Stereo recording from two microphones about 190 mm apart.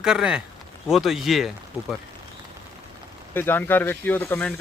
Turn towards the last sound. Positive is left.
turn(degrees=10)  # may be behind; listen again after turning